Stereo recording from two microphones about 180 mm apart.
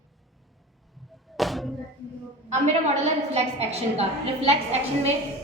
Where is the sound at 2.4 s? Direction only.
40° right (ahead or behind).